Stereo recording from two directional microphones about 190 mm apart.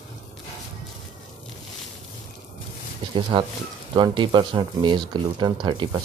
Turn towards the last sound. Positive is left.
turn(degrees=-25)  # may be behind; listen again after turning